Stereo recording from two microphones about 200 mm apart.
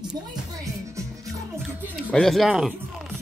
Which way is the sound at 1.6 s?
5° left (ahead or behind).